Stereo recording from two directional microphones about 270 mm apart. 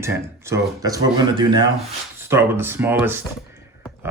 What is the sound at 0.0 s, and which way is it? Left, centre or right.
Speech, centre.